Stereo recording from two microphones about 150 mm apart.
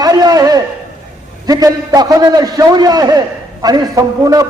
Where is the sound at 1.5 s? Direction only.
25° right (ahead or behind).